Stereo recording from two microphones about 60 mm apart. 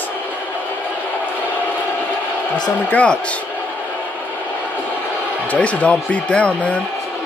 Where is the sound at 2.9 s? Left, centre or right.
Centre.